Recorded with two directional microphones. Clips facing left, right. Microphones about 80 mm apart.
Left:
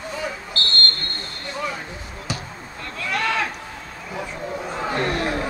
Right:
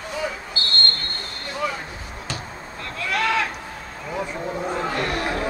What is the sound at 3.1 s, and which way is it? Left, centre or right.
Sheep, centre.